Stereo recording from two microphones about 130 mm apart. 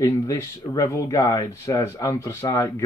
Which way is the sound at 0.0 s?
25° left (ahead or behind).